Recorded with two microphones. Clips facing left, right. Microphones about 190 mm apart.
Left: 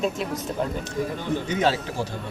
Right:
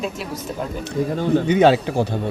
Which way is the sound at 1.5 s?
65° right (ahead or behind).